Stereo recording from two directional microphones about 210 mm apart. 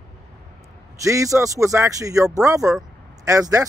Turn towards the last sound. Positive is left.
turn(degrees=-15)  # may be behind; listen again after turning